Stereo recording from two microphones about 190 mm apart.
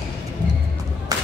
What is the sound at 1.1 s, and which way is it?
Battle cry, 20° right (ahead or behind).